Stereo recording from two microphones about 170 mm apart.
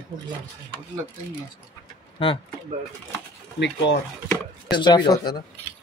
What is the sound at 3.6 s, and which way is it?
Speech, 90° left.